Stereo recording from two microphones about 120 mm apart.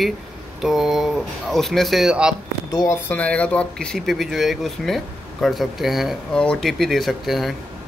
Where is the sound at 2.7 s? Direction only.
30° left (ahead or behind).